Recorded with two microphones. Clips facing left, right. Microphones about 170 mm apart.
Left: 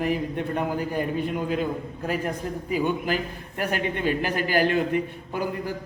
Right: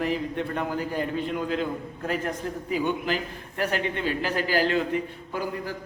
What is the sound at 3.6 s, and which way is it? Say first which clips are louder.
Speech: even; 15° left (ahead or behind).